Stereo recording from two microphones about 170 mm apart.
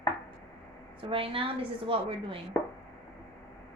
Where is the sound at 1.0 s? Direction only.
30° right (ahead or behind).